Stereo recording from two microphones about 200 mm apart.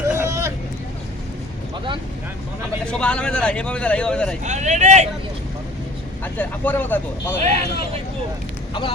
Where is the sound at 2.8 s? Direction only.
5° left (ahead or behind).